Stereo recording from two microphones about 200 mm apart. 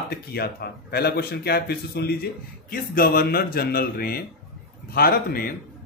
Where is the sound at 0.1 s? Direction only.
50° left (ahead or behind).